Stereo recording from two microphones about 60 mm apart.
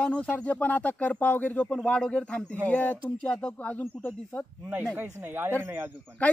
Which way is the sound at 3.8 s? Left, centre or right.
Left.